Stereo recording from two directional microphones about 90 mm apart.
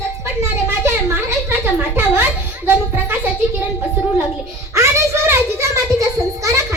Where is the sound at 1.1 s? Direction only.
30° right (ahead or behind).